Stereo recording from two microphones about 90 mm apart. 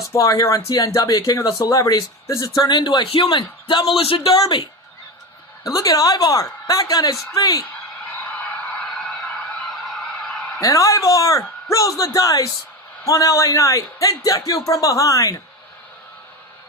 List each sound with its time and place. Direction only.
0.1 s a man's voice: 40° left (ahead or behind)
2.6 s a man's voice: 55° left (ahead or behind); by 4.6 s 75° left (ahead or behind)
5.6 s a man's voice: 45° left (ahead or behind)
9.6 s a sound: centre (ahead or behind)
10.6 s a man's voice: 40° left (ahead or behind)